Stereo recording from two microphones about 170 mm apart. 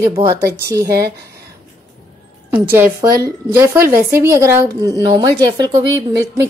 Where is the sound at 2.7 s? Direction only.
15° right (ahead or behind).